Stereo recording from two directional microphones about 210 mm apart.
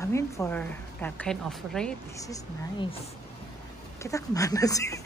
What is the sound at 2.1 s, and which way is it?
Speech, 15° left (ahead or behind).